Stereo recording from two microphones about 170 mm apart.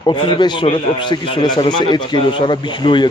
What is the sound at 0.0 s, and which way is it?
A man's voice, 30° left (ahead or behind).